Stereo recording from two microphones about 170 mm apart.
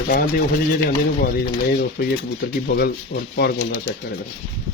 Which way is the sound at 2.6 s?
70° left (ahead or behind).